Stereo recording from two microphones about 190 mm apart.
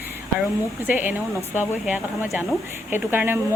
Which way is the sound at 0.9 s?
10° right (ahead or behind).